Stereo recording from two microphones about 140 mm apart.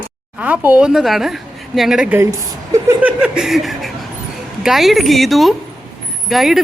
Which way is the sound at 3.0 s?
5° right (ahead or behind).